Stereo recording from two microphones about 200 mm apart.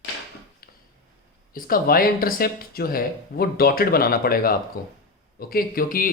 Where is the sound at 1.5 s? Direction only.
45° left (ahead or behind).